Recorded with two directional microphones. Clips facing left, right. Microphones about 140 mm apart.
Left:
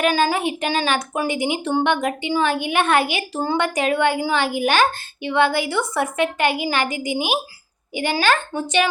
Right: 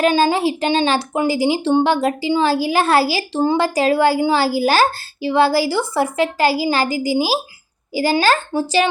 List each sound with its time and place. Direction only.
0.0 s speech: 25° right (ahead or behind)